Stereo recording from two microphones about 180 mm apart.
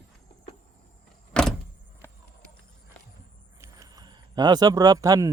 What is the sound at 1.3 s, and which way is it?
Vehicle, 5° left (ahead or behind).